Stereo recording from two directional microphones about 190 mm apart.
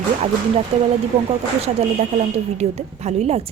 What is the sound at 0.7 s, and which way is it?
Speech, 35° right (ahead or behind).